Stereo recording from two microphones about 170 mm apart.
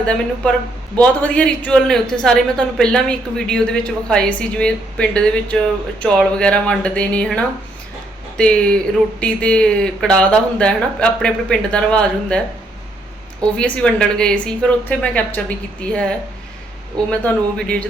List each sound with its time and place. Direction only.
0.0 s a man's voice: 5° left (ahead or behind)
13.4 s a man's voice: 5° left (ahead or behind)